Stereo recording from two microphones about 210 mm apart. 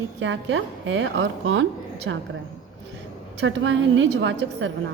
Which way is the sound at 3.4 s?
65° right (ahead or behind).